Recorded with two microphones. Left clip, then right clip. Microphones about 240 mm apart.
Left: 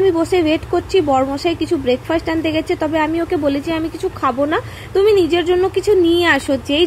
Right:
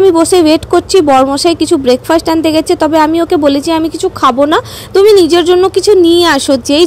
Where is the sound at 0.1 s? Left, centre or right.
Right.